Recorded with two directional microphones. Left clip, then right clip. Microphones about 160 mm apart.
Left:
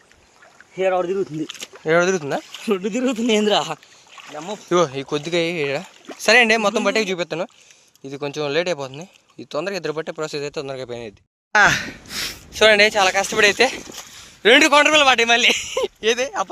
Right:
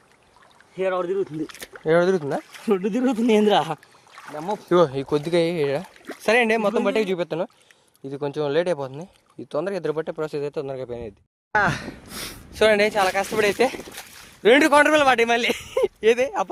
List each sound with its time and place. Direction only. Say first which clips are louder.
0.8 s speech: left 4 dB; 25° left (ahead or behind)
1.8 s speech: left 1 dB; 15° right (ahead or behind)
2.8 s speech: left 1 dB; 65° right (ahead or behind)
4.4 s speech: right 3 dB; 90° right
4.7 s speech: even; 30° right (ahead or behind)
6.1 s speech: left 5 dB; 10° right (ahead or behind)
11.5 s speech: left 6 dB; 5° left (ahead or behind)
14.6 s a man's voice: left 3 dB; 40° right (ahead or behind)